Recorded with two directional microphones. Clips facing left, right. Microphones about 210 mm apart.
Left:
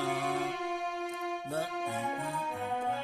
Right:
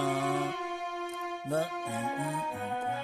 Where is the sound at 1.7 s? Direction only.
Centre (ahead or behind).